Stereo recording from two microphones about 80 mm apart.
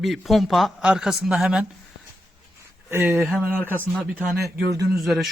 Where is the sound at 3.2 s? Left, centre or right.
Centre.